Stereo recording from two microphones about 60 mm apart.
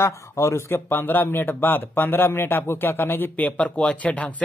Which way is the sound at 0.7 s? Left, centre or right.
Left.